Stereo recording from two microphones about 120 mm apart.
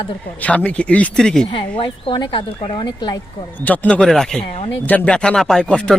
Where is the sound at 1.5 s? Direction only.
45° left (ahead or behind).